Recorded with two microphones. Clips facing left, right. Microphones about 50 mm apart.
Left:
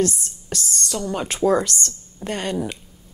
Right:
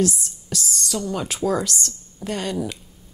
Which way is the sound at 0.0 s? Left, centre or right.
Left.